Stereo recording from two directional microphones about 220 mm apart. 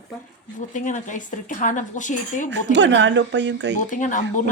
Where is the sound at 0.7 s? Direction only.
35° left (ahead or behind).